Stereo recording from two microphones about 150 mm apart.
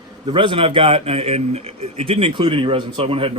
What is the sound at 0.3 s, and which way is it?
A man's voice, 35° right (ahead or behind).